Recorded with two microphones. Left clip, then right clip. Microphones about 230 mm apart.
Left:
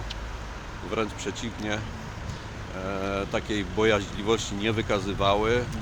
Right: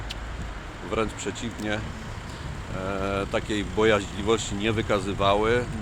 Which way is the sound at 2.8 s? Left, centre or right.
Centre.